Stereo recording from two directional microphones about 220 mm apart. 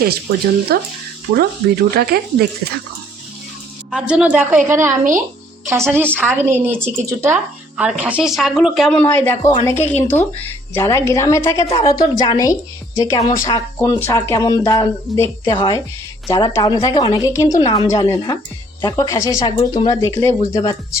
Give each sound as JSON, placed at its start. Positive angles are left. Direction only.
{"t": 0.7, "sound": "speech", "side_deg": -45}
{"t": 3.9, "sound": "speech", "side_deg": -5}
{"t": 6.1, "sound": "a woman's voice", "side_deg": -10}